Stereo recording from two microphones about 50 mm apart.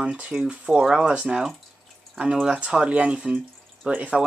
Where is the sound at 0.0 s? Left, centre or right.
Centre.